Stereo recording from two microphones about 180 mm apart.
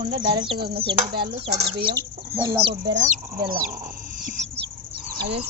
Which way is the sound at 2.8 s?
80° right.